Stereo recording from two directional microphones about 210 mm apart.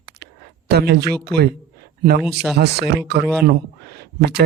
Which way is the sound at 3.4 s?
50° right (ahead or behind).